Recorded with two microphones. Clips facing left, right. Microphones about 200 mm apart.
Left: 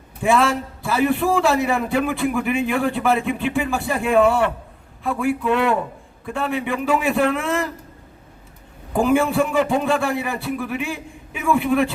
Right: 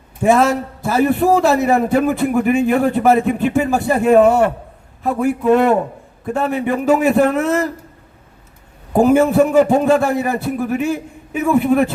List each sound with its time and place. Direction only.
0.2 s a man's voice: 45° right (ahead or behind)
8.9 s a man's voice: 40° right (ahead or behind)